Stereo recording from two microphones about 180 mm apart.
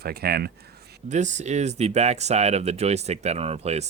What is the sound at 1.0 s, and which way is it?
Speech, 40° right (ahead or behind).